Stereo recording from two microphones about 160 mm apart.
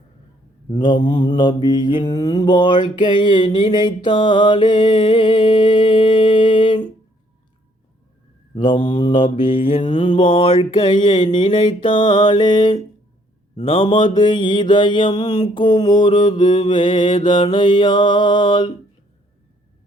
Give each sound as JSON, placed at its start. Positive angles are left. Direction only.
{"t": 0.7, "sound": "mantra", "side_deg": 30}
{"t": 8.5, "sound": "mantra", "side_deg": 30}